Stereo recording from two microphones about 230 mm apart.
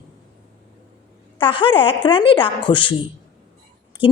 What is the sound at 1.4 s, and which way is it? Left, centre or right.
A woman's voice, left.